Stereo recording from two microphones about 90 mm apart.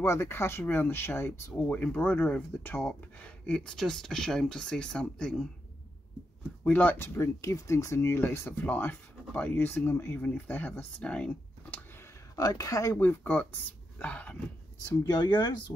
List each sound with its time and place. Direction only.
0.0 s speech: 30° left (ahead or behind)
1.5 s speech: 15° left (ahead or behind)
6.6 s speech: 20° left (ahead or behind)
7.2 s speech: 35° left (ahead or behind); by 11.8 s 10° left (ahead or behind)
12.4 s speech: 40° left (ahead or behind)
12.9 s speech: 20° left (ahead or behind)
15.0 s speech: 55° left (ahead or behind)